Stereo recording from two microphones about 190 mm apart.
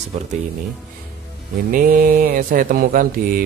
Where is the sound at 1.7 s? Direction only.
50° right (ahead or behind).